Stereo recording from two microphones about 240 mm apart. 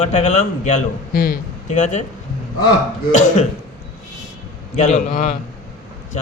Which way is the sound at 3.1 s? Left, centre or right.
Left.